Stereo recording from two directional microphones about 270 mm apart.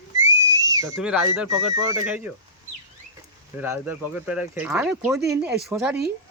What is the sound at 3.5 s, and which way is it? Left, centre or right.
Speech, centre.